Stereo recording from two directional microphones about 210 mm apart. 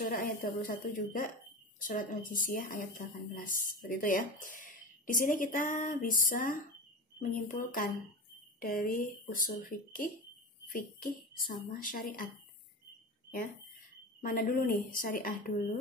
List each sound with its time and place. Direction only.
0.0 s speech: 40° left (ahead or behind)
14.2 s speech: 40° left (ahead or behind)